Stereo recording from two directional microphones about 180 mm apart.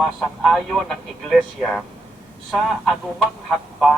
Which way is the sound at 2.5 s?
Centre (ahead or behind).